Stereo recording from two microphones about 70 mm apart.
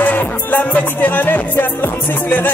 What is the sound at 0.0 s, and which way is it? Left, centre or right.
Music, left.